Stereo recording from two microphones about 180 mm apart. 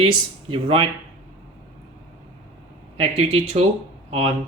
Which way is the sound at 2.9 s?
35° right (ahead or behind).